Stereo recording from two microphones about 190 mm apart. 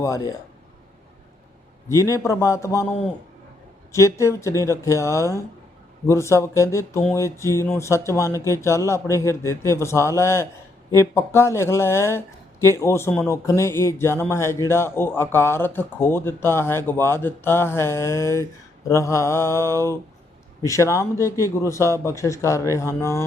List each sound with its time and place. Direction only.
0.0 s speech: 15° left (ahead or behind)
1.9 s speech: 15° left (ahead or behind)
3.9 s speech: 15° left (ahead or behind)